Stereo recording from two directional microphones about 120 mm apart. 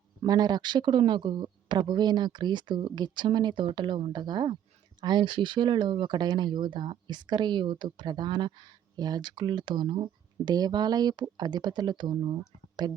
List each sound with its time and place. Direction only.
0.3 s speech: 35° right (ahead or behind)
10.4 s speech: 35° right (ahead or behind)